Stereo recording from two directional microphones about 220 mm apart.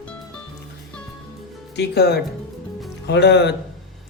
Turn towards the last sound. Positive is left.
turn(degrees=50)  # may be behind; listen again after turning